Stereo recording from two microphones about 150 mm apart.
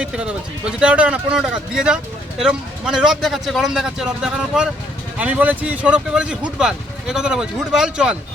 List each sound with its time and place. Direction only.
0.8 s speech: 5° right (ahead or behind)